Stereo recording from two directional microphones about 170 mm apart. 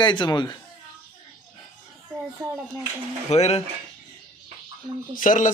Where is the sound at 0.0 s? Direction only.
25° left (ahead or behind).